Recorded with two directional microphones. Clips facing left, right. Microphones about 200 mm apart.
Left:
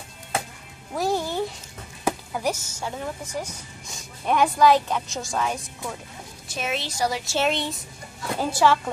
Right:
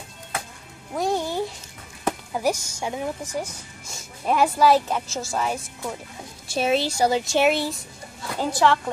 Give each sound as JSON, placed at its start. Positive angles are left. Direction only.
{"t": 0.9, "sound": "music", "side_deg": 0}
{"t": 2.3, "sound": "a woman's voice", "side_deg": -15}
{"t": 3.8, "sound": "speech", "side_deg": -5}
{"t": 6.5, "sound": "a woman's voice", "side_deg": -30}
{"t": 7.3, "sound": "a woman's voice", "side_deg": -5}
{"t": 8.4, "sound": "a woman's voice", "side_deg": 10}